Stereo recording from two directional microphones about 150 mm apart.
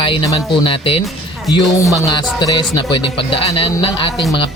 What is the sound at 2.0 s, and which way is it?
Speech, 25° left (ahead or behind).